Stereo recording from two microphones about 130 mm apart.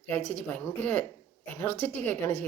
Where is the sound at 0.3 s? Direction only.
10° left (ahead or behind).